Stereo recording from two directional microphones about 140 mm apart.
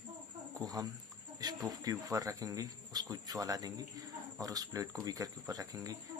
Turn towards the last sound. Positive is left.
turn(degrees=-25)  # may be behind; listen again after turning